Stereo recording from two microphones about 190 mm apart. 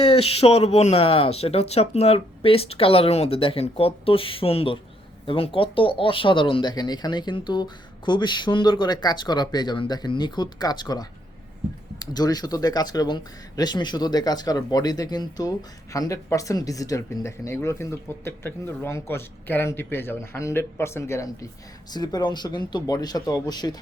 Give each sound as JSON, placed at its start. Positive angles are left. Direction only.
{"t": 0.0, "sound": "speech", "side_deg": 30}